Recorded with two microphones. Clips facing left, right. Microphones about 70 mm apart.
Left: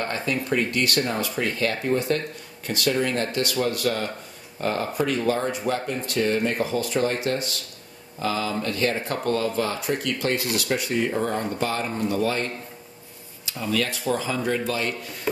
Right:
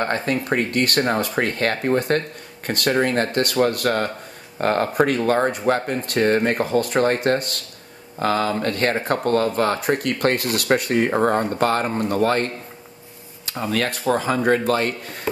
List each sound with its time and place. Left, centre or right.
0.0 s speech: right